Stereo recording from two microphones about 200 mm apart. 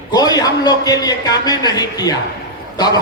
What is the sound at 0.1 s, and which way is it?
A man's voice, 20° left (ahead or behind).